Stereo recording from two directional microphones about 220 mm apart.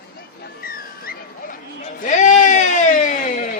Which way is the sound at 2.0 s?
35° left (ahead or behind).